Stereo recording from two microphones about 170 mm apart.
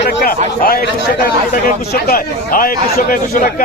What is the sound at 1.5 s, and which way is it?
A man's voice, 55° left (ahead or behind).